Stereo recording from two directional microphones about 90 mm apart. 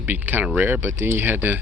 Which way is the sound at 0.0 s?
20° right (ahead or behind).